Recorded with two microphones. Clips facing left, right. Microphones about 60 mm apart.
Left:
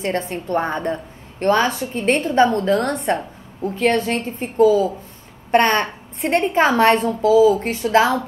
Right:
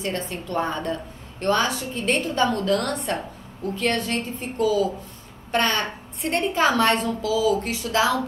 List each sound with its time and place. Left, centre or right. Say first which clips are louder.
0.0 s a woman's voice: left 5 dB; left